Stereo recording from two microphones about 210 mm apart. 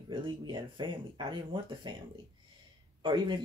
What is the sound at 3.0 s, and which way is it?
Speech, 20° right (ahead or behind).